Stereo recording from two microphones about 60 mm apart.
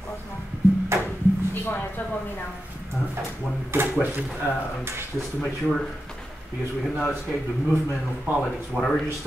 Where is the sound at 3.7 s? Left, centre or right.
Right.